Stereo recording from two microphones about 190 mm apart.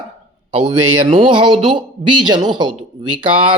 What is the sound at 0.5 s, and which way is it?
Speech, 25° right (ahead or behind).